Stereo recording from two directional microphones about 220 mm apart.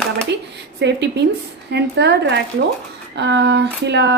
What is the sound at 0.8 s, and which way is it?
Speech, 50° right (ahead or behind).